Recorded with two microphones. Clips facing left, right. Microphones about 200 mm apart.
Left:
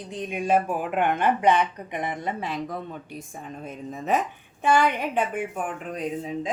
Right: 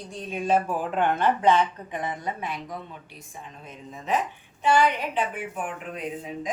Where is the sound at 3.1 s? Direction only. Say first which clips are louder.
Left 6 dB; 50° left (ahead or behind).